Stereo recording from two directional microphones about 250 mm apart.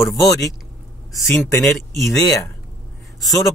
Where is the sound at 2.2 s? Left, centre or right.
Centre.